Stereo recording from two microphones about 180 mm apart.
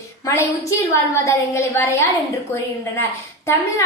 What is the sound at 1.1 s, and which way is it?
Speech, 15° left (ahead or behind).